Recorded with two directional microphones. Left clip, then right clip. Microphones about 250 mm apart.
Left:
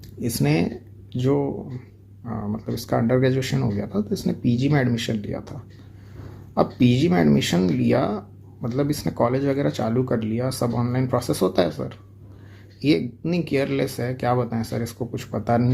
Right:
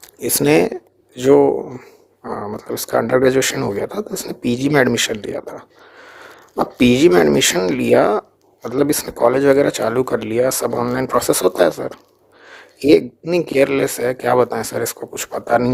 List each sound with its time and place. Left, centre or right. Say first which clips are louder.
0.2 s speech: right 10 dB; right
6.7 s speech: right 14 dB; right